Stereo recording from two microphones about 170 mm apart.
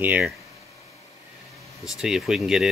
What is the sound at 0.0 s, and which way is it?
Speech, 10° right (ahead or behind).